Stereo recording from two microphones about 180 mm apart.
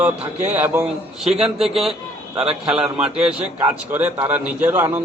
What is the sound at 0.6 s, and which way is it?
A man's voice, 10° right (ahead or behind).